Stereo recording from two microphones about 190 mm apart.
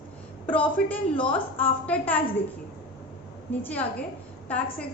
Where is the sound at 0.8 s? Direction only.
5° left (ahead or behind).